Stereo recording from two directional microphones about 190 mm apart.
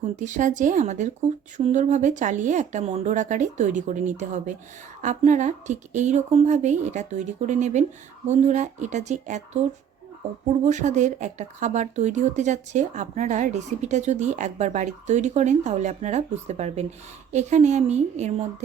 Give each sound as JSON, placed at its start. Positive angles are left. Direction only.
{"t": 0.0, "sound": "speech", "side_deg": -40}
{"t": 10.7, "sound": "speech", "side_deg": -40}